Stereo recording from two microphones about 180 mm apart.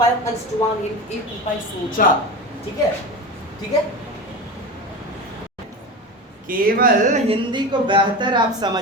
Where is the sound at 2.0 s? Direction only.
50° left (ahead or behind).